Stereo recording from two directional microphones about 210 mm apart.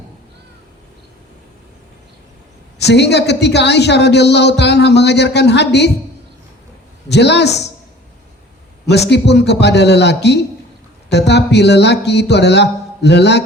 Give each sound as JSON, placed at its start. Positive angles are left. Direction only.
{"t": 2.7, "sound": "a woman's voice", "side_deg": 55}
{"t": 7.1, "sound": "a woman's voice", "side_deg": 55}
{"t": 8.9, "sound": "a woman's voice", "side_deg": 55}